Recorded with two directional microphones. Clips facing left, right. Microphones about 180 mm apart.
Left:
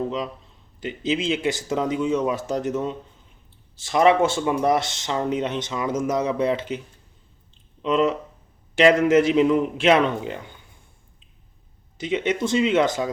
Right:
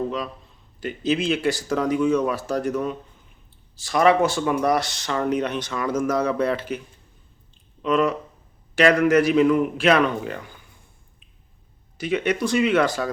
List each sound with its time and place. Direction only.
0.8 s speech: 20° left (ahead or behind)
11.9 s speech: 20° left (ahead or behind)